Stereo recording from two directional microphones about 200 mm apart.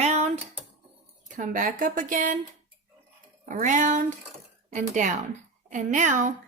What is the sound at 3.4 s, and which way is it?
Speech, 40° right (ahead or behind).